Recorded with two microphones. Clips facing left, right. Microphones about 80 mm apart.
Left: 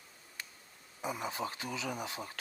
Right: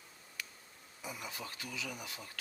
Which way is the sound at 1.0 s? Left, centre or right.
Left.